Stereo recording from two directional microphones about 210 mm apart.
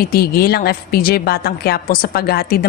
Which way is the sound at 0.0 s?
50° left (ahead or behind).